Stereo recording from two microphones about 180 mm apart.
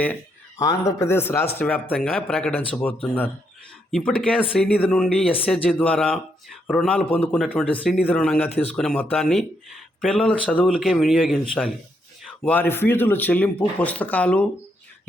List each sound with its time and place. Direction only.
0.6 s speech: 20° left (ahead or behind)